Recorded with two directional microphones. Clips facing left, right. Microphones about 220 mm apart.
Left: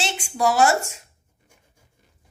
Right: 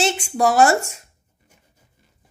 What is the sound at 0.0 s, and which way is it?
Speech, 50° right (ahead or behind).